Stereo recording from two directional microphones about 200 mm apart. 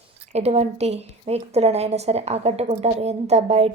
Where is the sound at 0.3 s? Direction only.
30° right (ahead or behind).